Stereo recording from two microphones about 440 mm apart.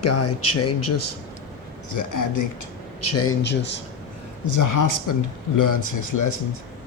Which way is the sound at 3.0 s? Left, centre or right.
Left.